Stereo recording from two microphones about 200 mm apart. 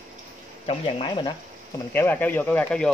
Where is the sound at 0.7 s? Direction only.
25° left (ahead or behind).